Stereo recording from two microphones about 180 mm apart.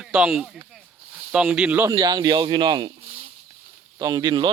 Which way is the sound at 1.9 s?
25° right (ahead or behind).